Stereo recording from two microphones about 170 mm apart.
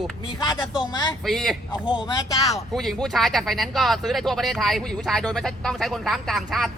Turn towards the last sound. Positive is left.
turn(degrees=0)  # may be behind; listen again after turning